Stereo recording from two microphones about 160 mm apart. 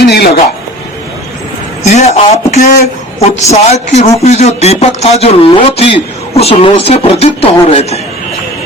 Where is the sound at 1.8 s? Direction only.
45° left (ahead or behind).